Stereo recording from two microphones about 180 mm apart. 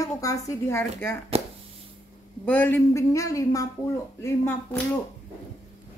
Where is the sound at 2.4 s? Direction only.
10° left (ahead or behind).